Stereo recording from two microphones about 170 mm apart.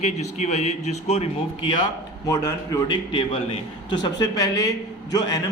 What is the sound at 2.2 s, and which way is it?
A man's voice, 20° left (ahead or behind).